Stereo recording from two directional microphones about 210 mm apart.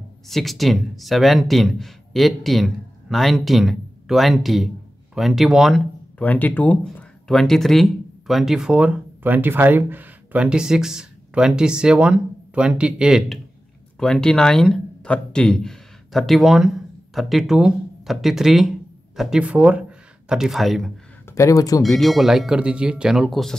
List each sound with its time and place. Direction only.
0.3 s speech: centre (ahead or behind)
21.3 s speech: 15° left (ahead or behind)
21.8 s speech: centre (ahead or behind)